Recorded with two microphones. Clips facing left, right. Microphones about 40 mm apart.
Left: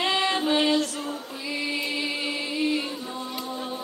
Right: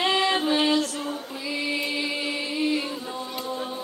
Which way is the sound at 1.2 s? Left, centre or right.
Centre.